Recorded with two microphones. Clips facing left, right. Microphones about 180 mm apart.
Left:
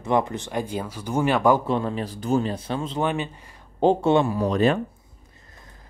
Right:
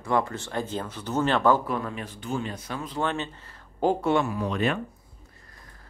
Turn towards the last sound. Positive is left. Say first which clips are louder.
# left 6 dB
turn(degrees=35)  # may be behind; listen again after turning